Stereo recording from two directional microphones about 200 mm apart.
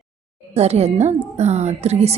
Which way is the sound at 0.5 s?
30° right (ahead or behind).